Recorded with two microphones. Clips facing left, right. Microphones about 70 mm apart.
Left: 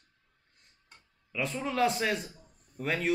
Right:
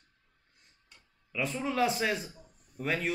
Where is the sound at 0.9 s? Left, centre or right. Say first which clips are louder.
Left 3 dB; left.